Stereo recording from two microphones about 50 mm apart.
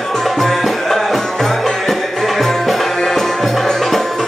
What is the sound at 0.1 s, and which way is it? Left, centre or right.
Music, centre.